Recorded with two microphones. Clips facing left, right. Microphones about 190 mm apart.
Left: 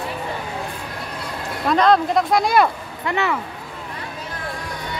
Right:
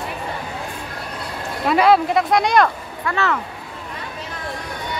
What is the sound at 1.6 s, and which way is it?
Speech, 5° right (ahead or behind).